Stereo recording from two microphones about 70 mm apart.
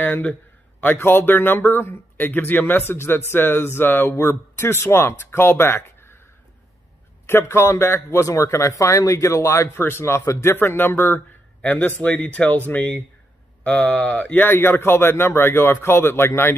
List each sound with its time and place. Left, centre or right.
0.0 s speech: left
7.2 s speech: left